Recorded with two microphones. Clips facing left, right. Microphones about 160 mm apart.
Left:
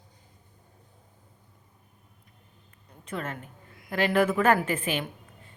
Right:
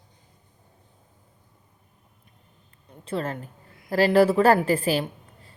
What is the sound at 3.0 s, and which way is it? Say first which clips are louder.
A woman's voice: right 6 dB; 30° right (ahead or behind).